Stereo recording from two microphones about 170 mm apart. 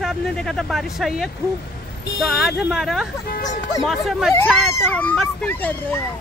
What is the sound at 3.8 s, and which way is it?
Speech, centre (ahead or behind).